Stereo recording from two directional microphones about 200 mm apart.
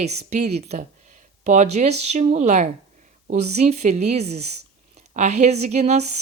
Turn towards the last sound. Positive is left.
turn(degrees=-35)  # may be behind; listen again after turning